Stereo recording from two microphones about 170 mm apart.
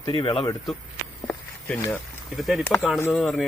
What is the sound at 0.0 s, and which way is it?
Speech, 25° left (ahead or behind).